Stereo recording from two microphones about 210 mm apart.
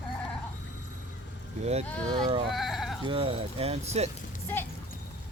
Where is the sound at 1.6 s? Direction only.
30° right (ahead or behind).